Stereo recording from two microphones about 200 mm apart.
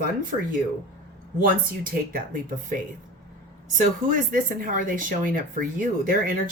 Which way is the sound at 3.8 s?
40° right (ahead or behind).